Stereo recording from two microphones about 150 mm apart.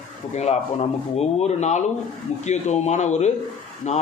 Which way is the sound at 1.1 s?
50° left (ahead or behind).